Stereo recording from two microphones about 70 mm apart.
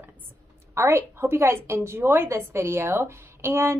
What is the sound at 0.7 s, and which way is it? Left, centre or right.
A woman's voice, right.